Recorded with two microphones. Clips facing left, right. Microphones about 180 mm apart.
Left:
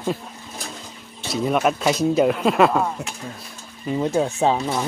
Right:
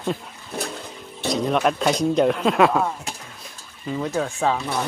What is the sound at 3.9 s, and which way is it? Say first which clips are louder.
Speech: left 4 dB; 25° left (ahead or behind).